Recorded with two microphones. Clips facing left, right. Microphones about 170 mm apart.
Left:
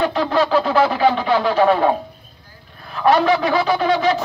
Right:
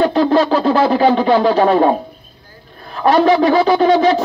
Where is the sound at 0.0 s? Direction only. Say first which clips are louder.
Right 5 dB; 40° right (ahead or behind).